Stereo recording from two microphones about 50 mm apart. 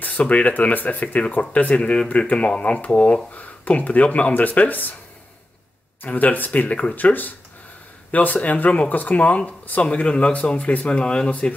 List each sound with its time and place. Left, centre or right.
0.0 s speech: left
1.8 s speech: centre; by 4.9 s left
6.0 s speech: left
7.0 s speech: left